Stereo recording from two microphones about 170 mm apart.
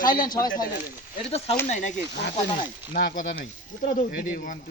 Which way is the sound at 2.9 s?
55° left (ahead or behind).